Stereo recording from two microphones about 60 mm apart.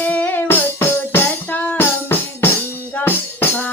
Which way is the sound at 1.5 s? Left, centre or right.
Left.